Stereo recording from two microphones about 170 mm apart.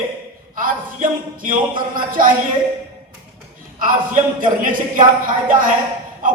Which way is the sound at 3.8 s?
55° right (ahead or behind).